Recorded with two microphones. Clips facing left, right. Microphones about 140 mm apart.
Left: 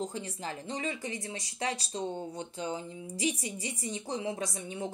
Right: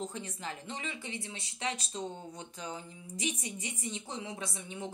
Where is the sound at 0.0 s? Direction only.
35° left (ahead or behind).